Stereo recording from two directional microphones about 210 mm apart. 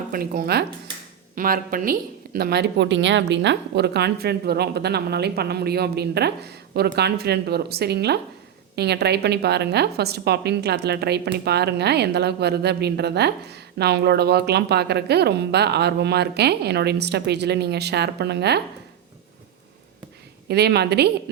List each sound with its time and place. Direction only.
0.1 s a woman's voice: 45° right (ahead or behind)
20.5 s a woman's voice: 50° right (ahead or behind)